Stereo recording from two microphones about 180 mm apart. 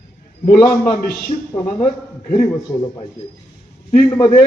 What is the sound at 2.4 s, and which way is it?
A man's voice, 20° left (ahead or behind).